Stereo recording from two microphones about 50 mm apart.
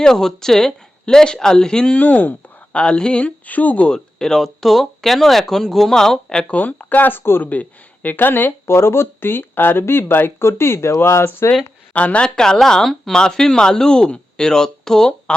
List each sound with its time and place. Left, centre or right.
0.0 s speech: centre
2.0 s speech: left
2.7 s speech: left
3.5 s speech: left
3.9 s speech: centre
6.5 s speech: left
7.4 s speech: left
11.9 s speech: left
12.2 s speech: centre